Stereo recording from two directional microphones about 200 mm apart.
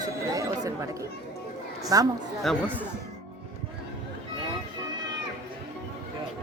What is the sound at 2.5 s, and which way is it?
Speech, centre (ahead or behind).